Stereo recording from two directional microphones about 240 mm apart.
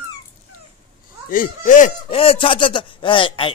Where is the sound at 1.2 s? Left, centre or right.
Left.